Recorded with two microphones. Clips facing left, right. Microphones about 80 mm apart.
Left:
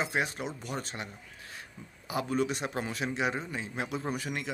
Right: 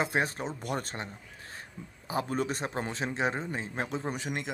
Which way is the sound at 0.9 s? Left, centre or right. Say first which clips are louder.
Right 1 dB; right.